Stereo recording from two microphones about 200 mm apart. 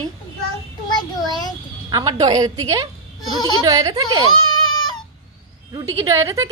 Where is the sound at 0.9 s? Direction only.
20° left (ahead or behind).